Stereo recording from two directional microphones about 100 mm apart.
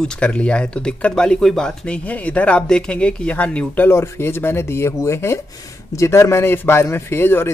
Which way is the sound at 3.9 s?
25° left (ahead or behind).